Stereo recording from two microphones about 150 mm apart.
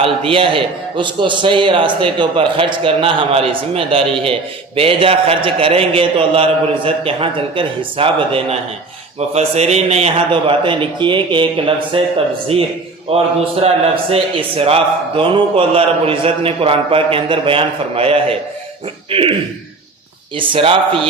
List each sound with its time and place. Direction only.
0.0 s a man's voice: 35° right (ahead or behind)
20.4 s a man's voice: 35° right (ahead or behind)